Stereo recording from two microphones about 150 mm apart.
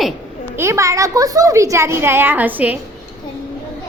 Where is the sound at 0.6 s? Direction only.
20° right (ahead or behind).